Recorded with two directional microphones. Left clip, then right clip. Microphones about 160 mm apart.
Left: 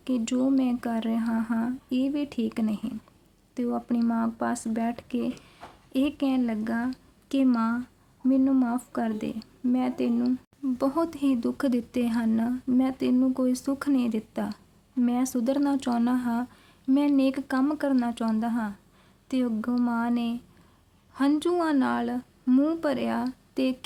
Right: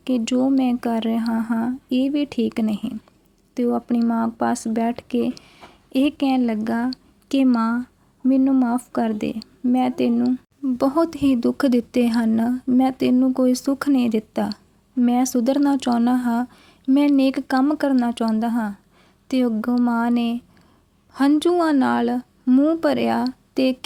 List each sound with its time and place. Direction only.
0.0 s a woman's voice: 30° right (ahead or behind)